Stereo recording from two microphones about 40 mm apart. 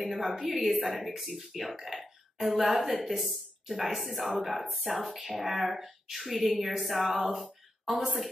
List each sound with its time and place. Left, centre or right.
0.0 s speech: centre